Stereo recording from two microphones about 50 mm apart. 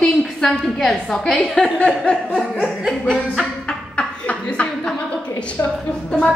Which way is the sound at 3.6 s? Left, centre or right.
Left.